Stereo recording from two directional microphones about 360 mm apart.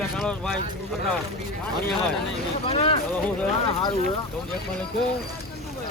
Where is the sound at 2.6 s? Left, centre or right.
Centre.